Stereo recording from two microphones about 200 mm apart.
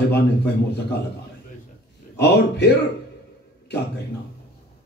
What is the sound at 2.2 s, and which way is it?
Speech, 55° left (ahead or behind).